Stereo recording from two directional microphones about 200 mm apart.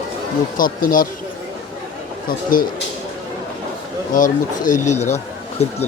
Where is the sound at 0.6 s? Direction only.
45° left (ahead or behind).